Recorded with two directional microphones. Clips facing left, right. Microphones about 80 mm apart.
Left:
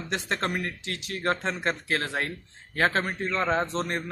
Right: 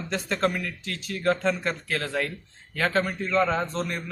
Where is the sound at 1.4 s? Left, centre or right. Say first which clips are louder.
Right 2 dB; left.